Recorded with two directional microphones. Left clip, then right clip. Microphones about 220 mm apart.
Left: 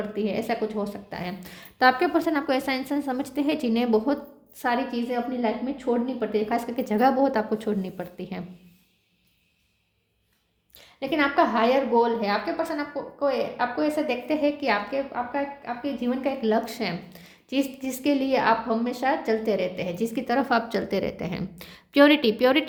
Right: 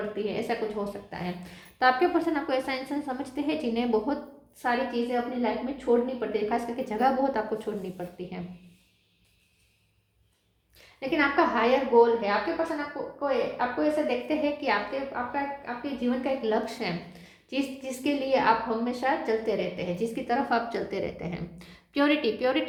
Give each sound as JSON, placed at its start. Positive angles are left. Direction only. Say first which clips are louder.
{"t": 0.3, "sound": "a woman's voice", "louder": "left 3 dB", "side_deg": 40}
{"t": 10.8, "sound": "a woman's voice", "louder": "left 2 dB", "side_deg": 45}